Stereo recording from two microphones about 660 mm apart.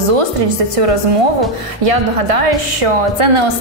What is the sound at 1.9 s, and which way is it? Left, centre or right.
A woman's voice, right.